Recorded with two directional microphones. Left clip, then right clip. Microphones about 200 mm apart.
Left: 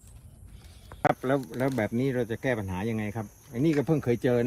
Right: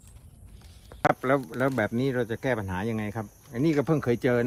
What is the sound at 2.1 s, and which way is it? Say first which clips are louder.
Speech: right 1 dB; 20° right (ahead or behind).